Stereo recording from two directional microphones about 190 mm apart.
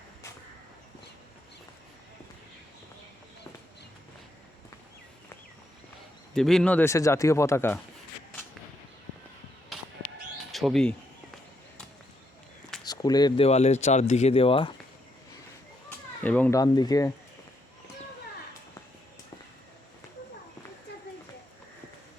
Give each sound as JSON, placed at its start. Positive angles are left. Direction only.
{"t": 6.3, "sound": "speech", "side_deg": 0}
{"t": 10.5, "sound": "speech", "side_deg": 0}
{"t": 12.8, "sound": "speech", "side_deg": 20}
{"t": 16.2, "sound": "speech", "side_deg": 10}
{"t": 16.6, "sound": "speech", "side_deg": 20}